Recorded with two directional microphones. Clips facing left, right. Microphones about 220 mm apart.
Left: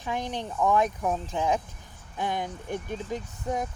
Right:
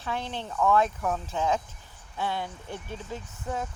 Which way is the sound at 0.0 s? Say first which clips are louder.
Left 2 dB; 15° left (ahead or behind).